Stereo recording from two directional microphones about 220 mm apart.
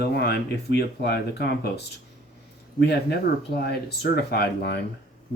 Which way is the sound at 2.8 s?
50° left (ahead or behind).